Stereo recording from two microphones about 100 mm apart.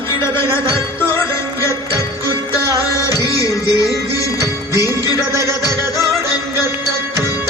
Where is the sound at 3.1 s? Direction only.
35° left (ahead or behind).